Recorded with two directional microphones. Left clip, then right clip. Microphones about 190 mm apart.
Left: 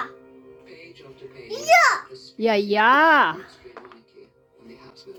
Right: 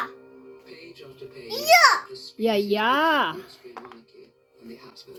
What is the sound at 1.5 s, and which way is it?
Babbling, 20° left (ahead or behind).